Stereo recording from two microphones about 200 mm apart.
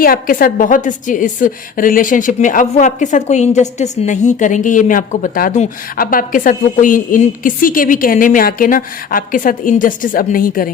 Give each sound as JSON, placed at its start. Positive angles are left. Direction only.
{"t": 0.0, "sound": "a woman's voice", "side_deg": 45}